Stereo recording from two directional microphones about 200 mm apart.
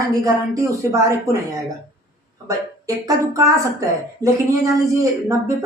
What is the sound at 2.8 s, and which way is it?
Speech, 15° right (ahead or behind).